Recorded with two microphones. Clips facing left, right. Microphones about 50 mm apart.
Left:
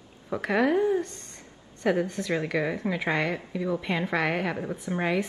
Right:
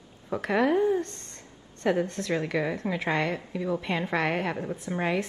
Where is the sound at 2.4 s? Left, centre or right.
Centre.